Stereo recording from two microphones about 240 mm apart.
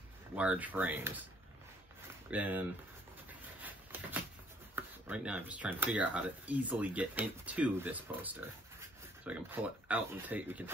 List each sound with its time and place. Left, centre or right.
0.4 s speech: centre
2.3 s speech: centre
3.6 s a sound: centre
4.7 s speech: centre